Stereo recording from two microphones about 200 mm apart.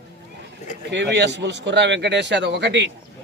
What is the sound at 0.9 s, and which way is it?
A man's voice, 60° right (ahead or behind).